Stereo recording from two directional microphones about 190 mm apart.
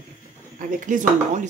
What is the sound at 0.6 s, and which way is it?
Speech, 45° right (ahead or behind).